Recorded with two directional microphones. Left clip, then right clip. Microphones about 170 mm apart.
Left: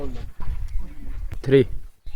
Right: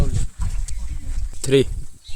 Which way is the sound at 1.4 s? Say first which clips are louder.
Even; 5° right (ahead or behind).